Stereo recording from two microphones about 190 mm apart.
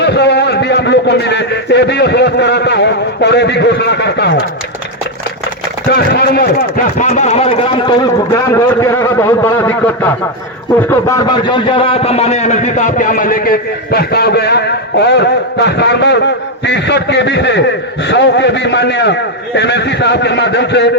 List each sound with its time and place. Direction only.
0.0 s a sound: 65° left (ahead or behind)
5.9 s speech: 55° left (ahead or behind); by 7.9 s 30° left (ahead or behind)
8.3 s a man's voice: 15° left (ahead or behind); by 20.9 s 65° left (ahead or behind)